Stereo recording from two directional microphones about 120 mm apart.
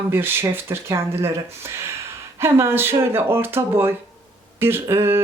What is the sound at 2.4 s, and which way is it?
Speech, 20° right (ahead or behind).